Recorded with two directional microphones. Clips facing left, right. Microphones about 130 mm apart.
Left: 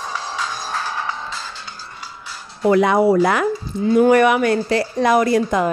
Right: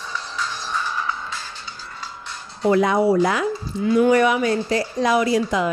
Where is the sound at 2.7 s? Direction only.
65° left (ahead or behind).